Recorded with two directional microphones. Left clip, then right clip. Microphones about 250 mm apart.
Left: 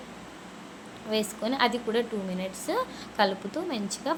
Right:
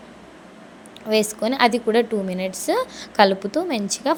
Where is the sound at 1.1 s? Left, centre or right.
Right.